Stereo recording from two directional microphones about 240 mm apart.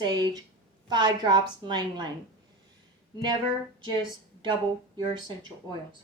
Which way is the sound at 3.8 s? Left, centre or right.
Centre.